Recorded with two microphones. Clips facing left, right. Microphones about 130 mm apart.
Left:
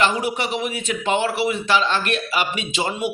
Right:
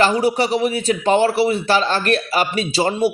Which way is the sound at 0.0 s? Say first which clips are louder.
Right 5 dB; 35° right (ahead or behind).